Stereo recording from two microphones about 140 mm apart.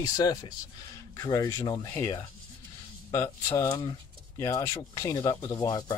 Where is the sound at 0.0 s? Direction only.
25° left (ahead or behind).